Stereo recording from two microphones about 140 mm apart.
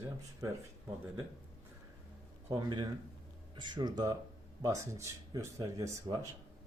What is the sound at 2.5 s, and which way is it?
Speech, 30° right (ahead or behind).